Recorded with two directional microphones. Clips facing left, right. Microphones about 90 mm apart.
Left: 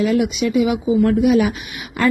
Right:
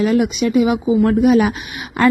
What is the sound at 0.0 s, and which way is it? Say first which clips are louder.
Speech: right 2 dB; 40° right (ahead or behind).